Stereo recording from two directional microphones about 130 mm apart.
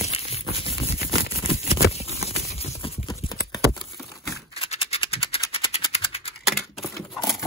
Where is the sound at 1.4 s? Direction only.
50° left (ahead or behind).